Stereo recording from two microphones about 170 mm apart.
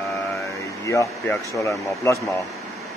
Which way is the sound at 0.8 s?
20° left (ahead or behind).